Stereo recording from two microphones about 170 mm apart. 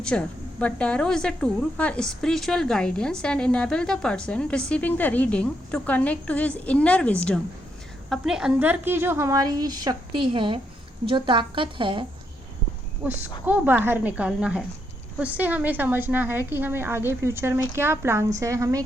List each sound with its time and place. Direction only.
0.0 s a woman's voice: 5° left (ahead or behind)
8.1 s a woman's voice: 5° right (ahead or behind); by 12.0 s 30° right (ahead or behind)
13.0 s a woman's voice: 10° right (ahead or behind)